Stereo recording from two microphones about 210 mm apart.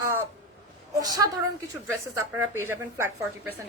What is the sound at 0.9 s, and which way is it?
A woman's voice, 15° right (ahead or behind).